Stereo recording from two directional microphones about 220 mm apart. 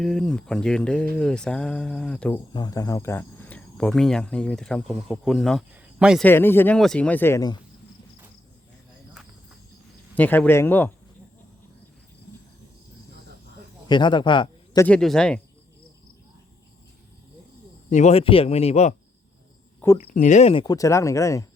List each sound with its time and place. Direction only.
0.0 s speech: centre (ahead or behind)
2.5 s speech: 15° left (ahead or behind); by 6.2 s 5° right (ahead or behind)
6.2 s speech: 10° left (ahead or behind)
10.2 s speech: 10° left (ahead or behind)
13.8 s a man's voice: 20° left (ahead or behind)
14.8 s speech: 5° left (ahead or behind)
17.9 s speech: 30° left (ahead or behind)
20.1 s speech: 35° left (ahead or behind); by 21.4 s 15° left (ahead or behind)